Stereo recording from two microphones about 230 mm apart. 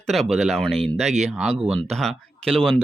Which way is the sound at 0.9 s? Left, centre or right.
Right.